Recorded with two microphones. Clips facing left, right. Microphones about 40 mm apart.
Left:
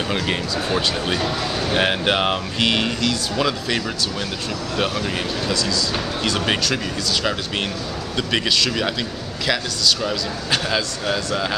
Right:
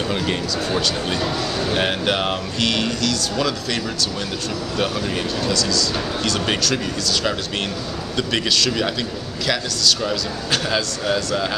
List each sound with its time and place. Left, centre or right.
0.1 s speech: centre